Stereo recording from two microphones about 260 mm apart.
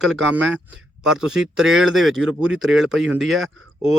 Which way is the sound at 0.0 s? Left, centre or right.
Centre.